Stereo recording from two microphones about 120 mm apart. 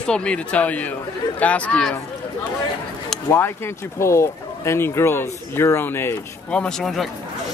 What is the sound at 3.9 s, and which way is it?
Speech, 25° left (ahead or behind).